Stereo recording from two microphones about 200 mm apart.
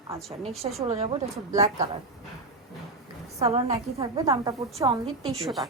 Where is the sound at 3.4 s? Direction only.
30° right (ahead or behind).